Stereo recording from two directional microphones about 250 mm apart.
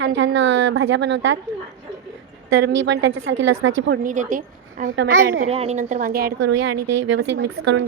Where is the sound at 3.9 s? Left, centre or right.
Right.